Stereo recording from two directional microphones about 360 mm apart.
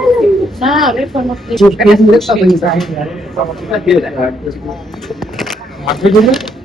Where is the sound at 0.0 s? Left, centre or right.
Centre.